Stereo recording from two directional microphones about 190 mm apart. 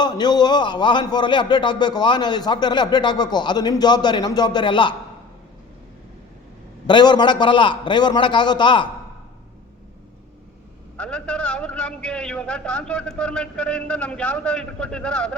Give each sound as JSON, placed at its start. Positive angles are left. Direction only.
{"t": 0.0, "sound": "a man's voice", "side_deg": 20}
{"t": 6.8, "sound": "a man's voice", "side_deg": 25}
{"t": 10.9, "sound": "a man's voice", "side_deg": 5}